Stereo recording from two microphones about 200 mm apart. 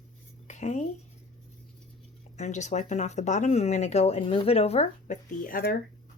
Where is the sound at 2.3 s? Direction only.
35° left (ahead or behind).